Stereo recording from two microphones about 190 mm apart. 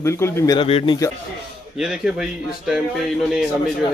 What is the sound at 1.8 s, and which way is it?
Speech, 5° right (ahead or behind).